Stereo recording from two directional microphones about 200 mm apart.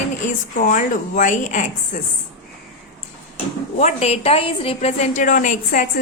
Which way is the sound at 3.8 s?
35° left (ahead or behind).